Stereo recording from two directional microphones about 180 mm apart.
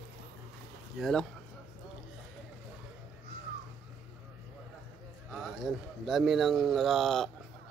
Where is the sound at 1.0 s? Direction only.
5° left (ahead or behind).